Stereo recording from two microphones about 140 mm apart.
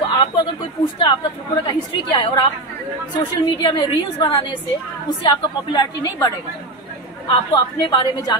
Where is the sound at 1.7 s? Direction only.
35° left (ahead or behind).